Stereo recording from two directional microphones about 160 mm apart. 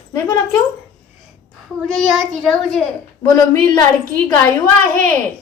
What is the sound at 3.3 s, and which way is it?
Speech, 20° left (ahead or behind).